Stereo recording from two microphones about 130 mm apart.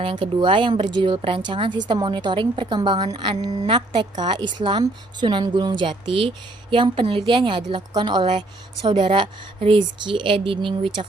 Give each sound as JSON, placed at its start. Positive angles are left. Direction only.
{"t": 0.0, "sound": "speech", "side_deg": -40}